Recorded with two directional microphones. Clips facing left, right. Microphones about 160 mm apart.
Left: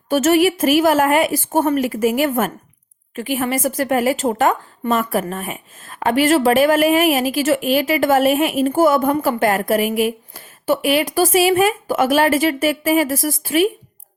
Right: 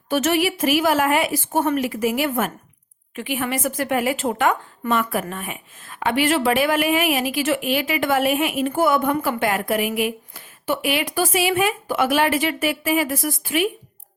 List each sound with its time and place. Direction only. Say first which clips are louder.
0.1 s a woman's voice: left 6 dB; 45° left (ahead or behind)